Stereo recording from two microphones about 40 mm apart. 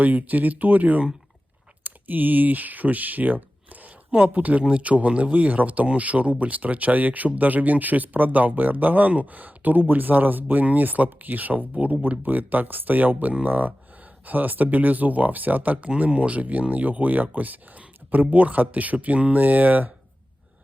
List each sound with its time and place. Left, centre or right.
0.0 s speech: right
16.0 s speech: right